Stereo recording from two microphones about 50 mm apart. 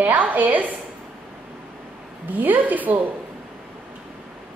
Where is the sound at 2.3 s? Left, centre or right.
Right.